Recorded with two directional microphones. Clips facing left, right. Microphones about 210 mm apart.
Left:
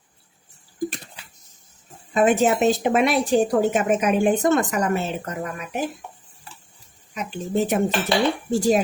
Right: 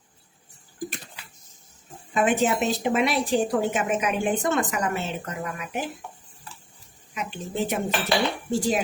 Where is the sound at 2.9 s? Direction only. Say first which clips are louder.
Left 4 dB; 50° left (ahead or behind).